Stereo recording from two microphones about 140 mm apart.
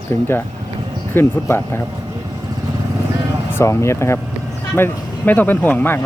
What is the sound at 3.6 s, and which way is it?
Speech, 20° left (ahead or behind).